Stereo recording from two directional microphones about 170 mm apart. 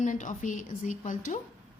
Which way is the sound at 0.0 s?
50° left (ahead or behind).